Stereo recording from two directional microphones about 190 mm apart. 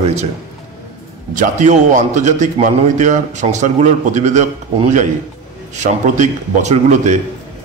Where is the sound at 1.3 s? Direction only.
40° right (ahead or behind).